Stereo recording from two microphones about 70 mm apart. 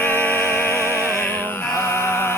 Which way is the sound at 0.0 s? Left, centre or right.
Left.